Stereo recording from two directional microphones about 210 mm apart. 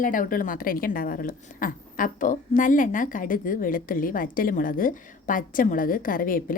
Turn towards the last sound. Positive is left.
turn(degrees=40)  # may be behind; listen again after turning